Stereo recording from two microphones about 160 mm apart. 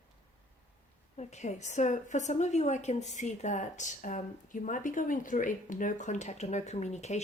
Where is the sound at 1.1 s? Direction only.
45° left (ahead or behind).